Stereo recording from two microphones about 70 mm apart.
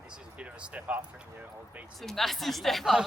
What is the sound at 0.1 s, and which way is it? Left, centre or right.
Speech, centre.